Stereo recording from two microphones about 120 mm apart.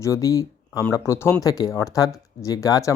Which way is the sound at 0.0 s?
25° left (ahead or behind).